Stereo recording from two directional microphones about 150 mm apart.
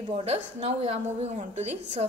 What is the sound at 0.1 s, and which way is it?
A woman's voice, 45° right (ahead or behind).